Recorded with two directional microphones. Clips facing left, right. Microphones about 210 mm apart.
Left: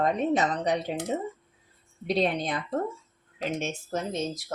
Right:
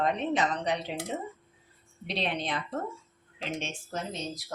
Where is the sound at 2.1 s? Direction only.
45° left (ahead or behind).